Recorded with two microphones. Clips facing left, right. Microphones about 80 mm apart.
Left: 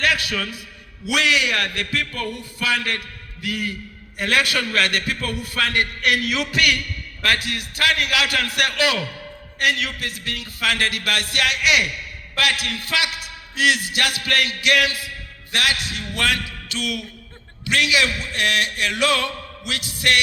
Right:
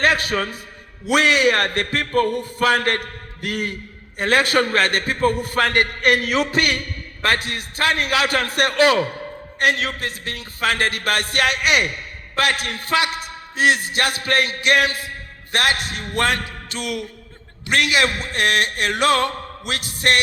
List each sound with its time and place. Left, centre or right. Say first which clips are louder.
0.0 s a man's voice: right 3 dB; right